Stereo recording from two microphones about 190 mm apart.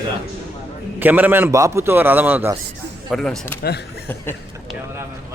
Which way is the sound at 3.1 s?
5° left (ahead or behind).